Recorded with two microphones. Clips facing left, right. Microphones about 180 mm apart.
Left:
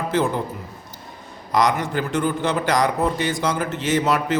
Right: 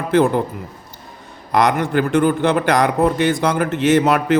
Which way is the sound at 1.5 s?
60° right (ahead or behind).